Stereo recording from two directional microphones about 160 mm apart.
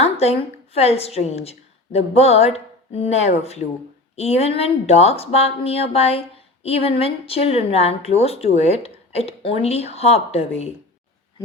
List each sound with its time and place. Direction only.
0.0 s a woman's voice: 40° left (ahead or behind)